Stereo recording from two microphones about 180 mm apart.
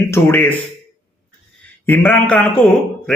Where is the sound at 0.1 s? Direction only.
10° left (ahead or behind).